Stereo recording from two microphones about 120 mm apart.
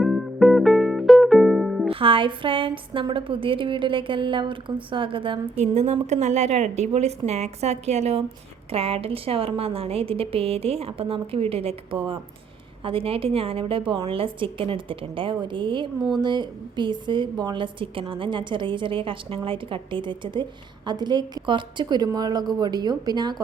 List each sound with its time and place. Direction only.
0.0 s music: centre (ahead or behind)
1.9 s a woman's voice: 50° right (ahead or behind)
5.5 s speech: 70° right (ahead or behind)
8.7 s a woman's voice: 55° right (ahead or behind); by 23.4 s 35° right (ahead or behind)